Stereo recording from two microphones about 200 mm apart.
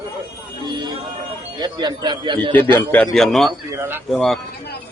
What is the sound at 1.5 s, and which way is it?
Speech, 20° right (ahead or behind).